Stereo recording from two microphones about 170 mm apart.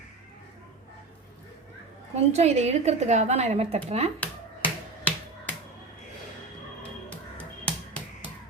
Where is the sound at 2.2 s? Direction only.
40° right (ahead or behind).